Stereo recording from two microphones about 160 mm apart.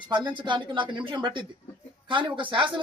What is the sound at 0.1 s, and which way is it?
Speech, 30° right (ahead or behind).